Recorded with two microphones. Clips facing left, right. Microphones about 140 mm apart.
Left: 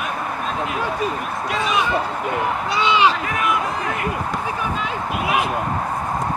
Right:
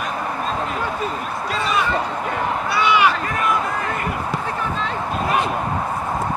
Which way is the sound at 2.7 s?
20° left (ahead or behind).